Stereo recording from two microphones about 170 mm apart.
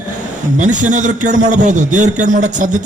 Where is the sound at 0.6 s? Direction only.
45° right (ahead or behind).